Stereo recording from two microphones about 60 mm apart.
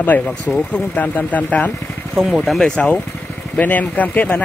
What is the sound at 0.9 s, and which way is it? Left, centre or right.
Speech, left.